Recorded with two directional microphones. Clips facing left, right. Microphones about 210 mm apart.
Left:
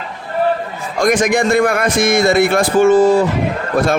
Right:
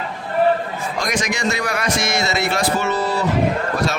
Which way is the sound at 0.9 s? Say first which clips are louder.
Left 11 dB; 50° left (ahead or behind).